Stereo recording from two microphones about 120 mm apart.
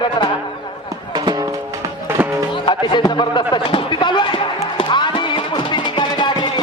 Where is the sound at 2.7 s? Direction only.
40° left (ahead or behind).